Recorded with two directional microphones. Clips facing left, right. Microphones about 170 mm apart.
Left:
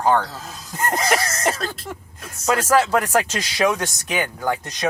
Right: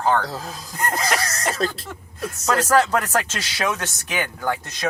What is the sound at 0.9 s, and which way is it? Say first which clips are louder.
Cough: left 5 dB; 25° left (ahead or behind).